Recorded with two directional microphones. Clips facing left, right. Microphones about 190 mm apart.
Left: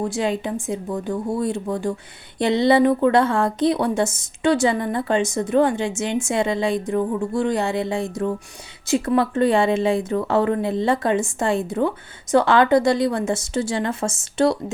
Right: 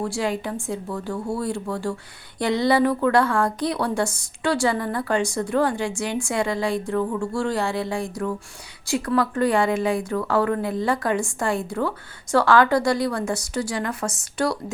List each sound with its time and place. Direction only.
0.0 s a woman's voice: 20° left (ahead or behind)